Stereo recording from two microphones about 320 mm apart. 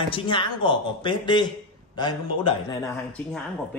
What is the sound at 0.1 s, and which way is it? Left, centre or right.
Speech, centre.